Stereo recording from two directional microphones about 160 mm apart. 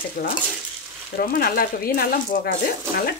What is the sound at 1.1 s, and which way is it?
Speech, 65° left (ahead or behind).